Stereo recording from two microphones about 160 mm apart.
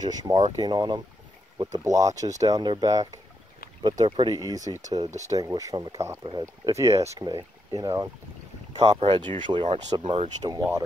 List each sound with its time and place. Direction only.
0.0 s speech: 25° right (ahead or behind)